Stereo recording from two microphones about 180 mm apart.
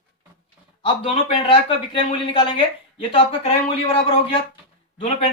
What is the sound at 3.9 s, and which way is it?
Speech, 30° left (ahead or behind).